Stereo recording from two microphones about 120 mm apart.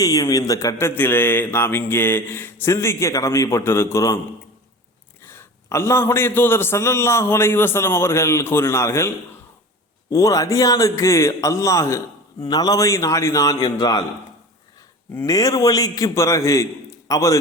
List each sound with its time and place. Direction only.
0.0 s speech: 30° left (ahead or behind)
5.2 s a man's voice: 20° left (ahead or behind)
15.1 s a man's voice: 25° left (ahead or behind)